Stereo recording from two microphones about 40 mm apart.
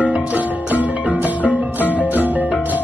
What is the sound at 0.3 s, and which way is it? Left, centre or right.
Music, right.